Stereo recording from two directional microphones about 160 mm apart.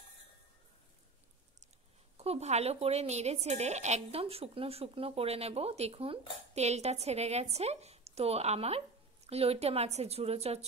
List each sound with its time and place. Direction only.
2.1 s a woman's voice: 40° right (ahead or behind)